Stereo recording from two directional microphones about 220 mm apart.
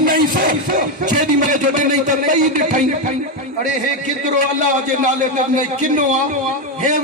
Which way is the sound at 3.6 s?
35° right (ahead or behind).